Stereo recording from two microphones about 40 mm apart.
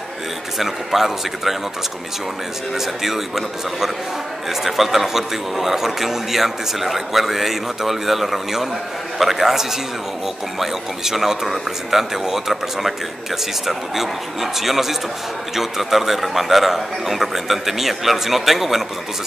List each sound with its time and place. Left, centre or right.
0.6 s speech: centre
2.7 s a man's voice: centre